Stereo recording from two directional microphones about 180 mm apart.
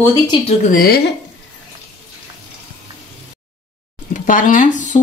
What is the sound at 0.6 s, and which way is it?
Speech, 55° left (ahead or behind).